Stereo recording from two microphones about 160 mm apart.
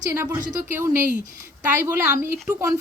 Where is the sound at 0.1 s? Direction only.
20° right (ahead or behind).